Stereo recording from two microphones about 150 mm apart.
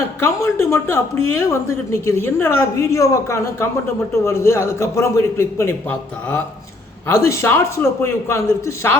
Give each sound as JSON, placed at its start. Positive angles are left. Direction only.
{"t": 0.2, "sound": "a woman's voice", "side_deg": 15}
{"t": 7.1, "sound": "a woman's voice", "side_deg": 20}